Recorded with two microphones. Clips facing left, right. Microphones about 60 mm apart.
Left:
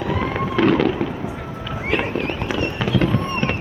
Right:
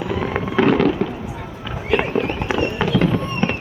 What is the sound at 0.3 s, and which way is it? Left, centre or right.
Fireworks, centre.